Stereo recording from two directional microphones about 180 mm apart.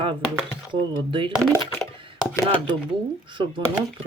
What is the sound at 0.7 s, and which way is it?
Speech, 25° right (ahead or behind).